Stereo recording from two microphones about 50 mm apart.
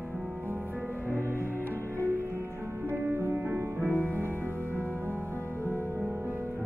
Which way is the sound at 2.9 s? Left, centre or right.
Right.